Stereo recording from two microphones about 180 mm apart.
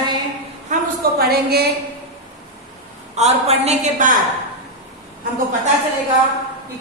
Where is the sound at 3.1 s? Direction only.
35° right (ahead or behind).